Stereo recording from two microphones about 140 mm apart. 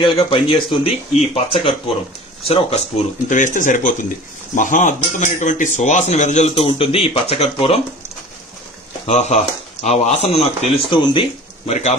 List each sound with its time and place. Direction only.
0.0 s speech: 35° left (ahead or behind)
9.0 s speech: 55° left (ahead or behind)
11.7 s speech: 55° left (ahead or behind)